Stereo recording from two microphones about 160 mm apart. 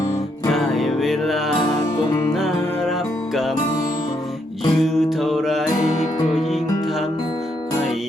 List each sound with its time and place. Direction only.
0.5 s music: centre (ahead or behind)
4.8 s music: centre (ahead or behind)